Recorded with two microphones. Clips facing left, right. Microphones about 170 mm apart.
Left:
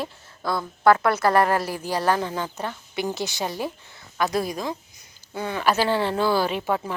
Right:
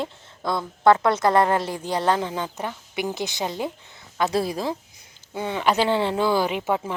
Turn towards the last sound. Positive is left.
turn(degrees=-20)  # may be behind; listen again after turning